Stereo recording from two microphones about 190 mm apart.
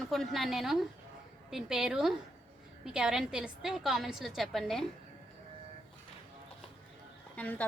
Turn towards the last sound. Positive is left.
turn(degrees=10)  # may be behind; listen again after turning